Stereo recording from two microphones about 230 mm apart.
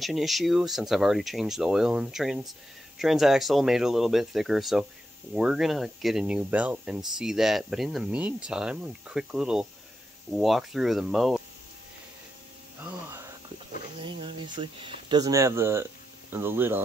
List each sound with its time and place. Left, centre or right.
0.0 s speech: centre
13.9 s speech: right